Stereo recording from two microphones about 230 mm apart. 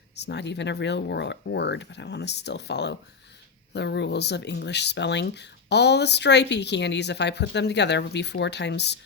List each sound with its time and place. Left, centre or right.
0.2 s speech: left